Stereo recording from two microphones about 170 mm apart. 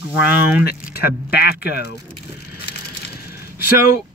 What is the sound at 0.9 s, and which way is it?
Speech, 65° left (ahead or behind).